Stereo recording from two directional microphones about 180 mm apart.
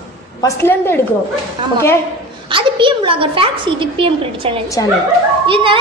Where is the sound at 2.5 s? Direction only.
30° right (ahead or behind).